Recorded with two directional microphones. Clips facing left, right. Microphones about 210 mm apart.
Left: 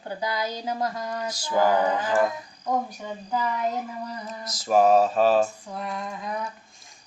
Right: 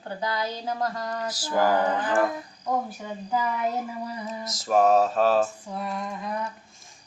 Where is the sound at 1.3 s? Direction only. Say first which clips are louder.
Left 1 dB; 5° right (ahead or behind).